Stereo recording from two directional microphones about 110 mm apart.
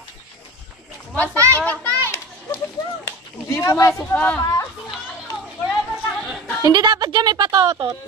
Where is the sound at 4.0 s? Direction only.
15° left (ahead or behind).